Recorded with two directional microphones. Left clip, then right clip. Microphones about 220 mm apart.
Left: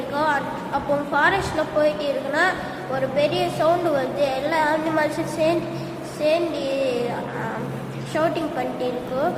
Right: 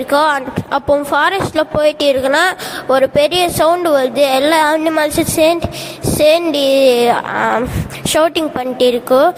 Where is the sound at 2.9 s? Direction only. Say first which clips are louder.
Right 11 dB; 50° right (ahead or behind).